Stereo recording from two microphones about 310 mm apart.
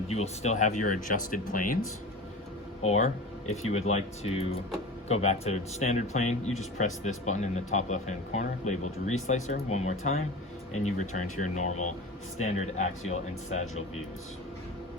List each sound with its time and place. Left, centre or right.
0.1 s speech: left
2.8 s speech: left